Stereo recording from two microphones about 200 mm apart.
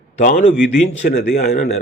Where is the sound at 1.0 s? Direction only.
45° left (ahead or behind).